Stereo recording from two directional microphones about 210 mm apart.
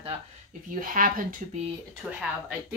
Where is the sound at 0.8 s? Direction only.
40° right (ahead or behind).